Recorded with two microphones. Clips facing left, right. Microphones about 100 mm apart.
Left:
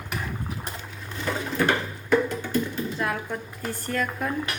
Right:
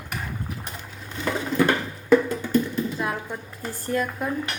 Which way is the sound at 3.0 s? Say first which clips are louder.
Even; 15° right (ahead or behind).